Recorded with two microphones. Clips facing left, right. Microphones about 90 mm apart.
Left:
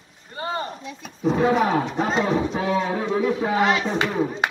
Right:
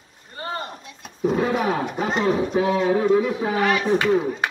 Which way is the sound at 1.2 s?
5° right (ahead or behind).